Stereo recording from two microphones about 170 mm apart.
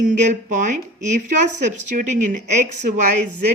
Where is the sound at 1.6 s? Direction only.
45° right (ahead or behind).